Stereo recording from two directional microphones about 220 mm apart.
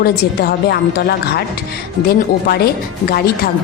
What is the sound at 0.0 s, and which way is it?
A woman's voice, 45° left (ahead or behind).